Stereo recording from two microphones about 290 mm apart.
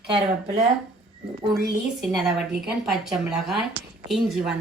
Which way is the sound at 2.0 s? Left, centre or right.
Centre.